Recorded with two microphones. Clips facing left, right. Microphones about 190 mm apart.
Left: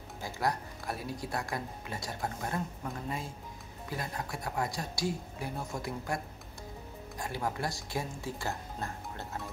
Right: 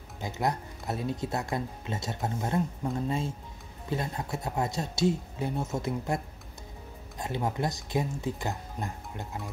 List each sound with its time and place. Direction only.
0.2 s speech: 20° right (ahead or behind)